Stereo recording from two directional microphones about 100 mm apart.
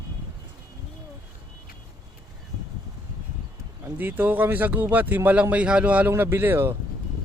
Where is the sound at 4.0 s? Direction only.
20° right (ahead or behind).